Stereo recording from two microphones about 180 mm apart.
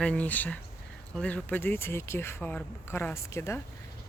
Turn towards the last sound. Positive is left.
turn(degrees=15)  # may be behind; listen again after turning